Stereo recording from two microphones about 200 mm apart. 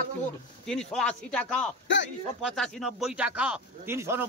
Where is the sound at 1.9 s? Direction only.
65° left (ahead or behind).